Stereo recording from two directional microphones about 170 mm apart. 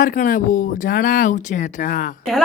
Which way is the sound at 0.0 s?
55° left (ahead or behind).